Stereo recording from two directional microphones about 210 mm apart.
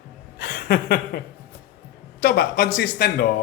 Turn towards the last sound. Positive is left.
turn(degrees=50)  # may be behind; listen again after turning